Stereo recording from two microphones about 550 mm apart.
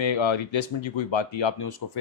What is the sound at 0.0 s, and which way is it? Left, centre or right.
Speech, left.